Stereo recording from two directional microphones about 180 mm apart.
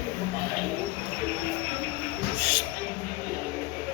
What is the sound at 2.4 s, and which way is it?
Music, 30° right (ahead or behind).